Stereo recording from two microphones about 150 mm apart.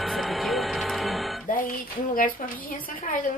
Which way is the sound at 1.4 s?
65° left (ahead or behind).